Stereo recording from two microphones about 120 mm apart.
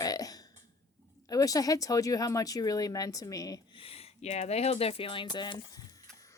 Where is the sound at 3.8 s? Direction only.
55° left (ahead or behind); by 6.0 s 35° left (ahead or behind).